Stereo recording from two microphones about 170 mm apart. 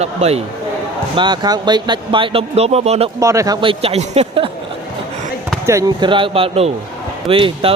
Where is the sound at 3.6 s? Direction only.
35° right (ahead or behind).